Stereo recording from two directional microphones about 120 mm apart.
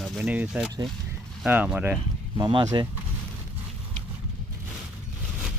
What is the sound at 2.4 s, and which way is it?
Speech, 40° right (ahead or behind).